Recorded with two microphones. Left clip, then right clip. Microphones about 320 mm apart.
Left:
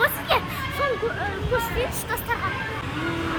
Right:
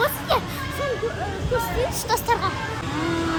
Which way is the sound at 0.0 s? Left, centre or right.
Centre.